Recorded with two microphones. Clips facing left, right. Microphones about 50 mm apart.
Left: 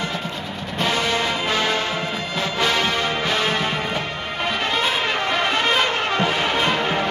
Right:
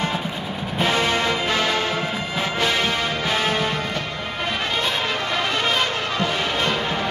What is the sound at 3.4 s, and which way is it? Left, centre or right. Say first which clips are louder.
Music: even; left.